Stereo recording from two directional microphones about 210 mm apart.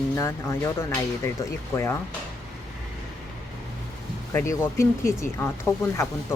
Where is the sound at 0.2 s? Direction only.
15° left (ahead or behind).